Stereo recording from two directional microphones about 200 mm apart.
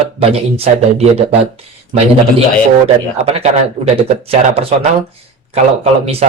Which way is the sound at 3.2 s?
30° right (ahead or behind).